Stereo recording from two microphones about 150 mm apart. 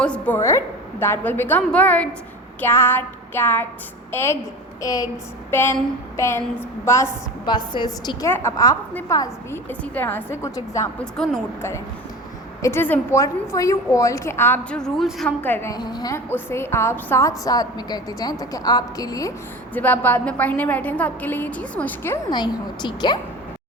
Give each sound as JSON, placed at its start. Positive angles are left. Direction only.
{"t": 0.0, "sound": "a woman's voice", "side_deg": 10}
{"t": 7.4, "sound": "a woman's voice", "side_deg": 30}
{"t": 12.6, "sound": "a woman's voice", "side_deg": 15}
{"t": 15.7, "sound": "a woman's voice", "side_deg": 30}
{"t": 19.7, "sound": "a woman's voice", "side_deg": 10}
{"t": 22.3, "sound": "a woman's voice", "side_deg": 30}